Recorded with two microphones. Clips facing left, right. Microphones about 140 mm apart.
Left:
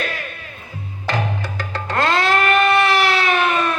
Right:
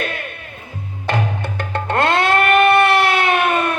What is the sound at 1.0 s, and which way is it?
Music, 55° right (ahead or behind).